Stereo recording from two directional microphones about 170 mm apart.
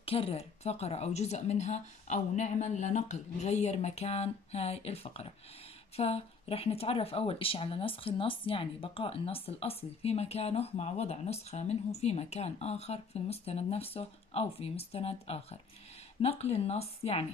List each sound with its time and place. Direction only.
0.0 s speech: 35° left (ahead or behind)